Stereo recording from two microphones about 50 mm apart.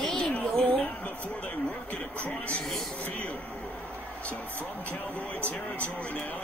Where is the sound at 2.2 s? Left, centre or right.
Left.